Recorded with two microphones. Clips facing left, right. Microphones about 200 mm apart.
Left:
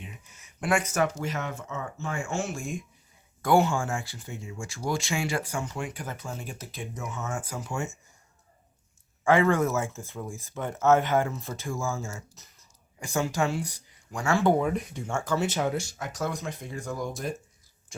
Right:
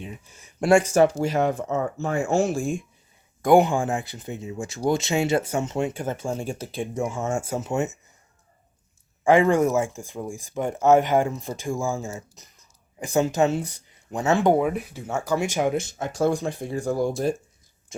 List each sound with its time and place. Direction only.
0.0 s speech: 30° right (ahead or behind)
3.4 s speech: 15° right (ahead or behind)
9.2 s speech: 15° right (ahead or behind)
14.6 s speech: 5° right (ahead or behind); by 17.3 s 30° right (ahead or behind)